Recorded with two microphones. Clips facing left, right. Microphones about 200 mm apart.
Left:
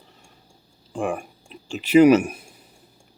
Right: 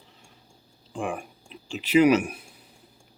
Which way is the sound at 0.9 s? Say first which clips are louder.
Left 5 dB; 45° left (ahead or behind).